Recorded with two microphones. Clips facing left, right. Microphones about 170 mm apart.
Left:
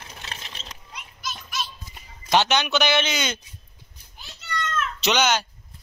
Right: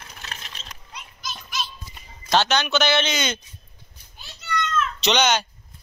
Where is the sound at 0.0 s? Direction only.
25° left (ahead or behind).